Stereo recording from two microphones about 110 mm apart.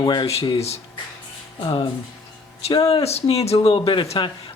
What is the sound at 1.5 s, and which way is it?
Speech, 50° left (ahead or behind).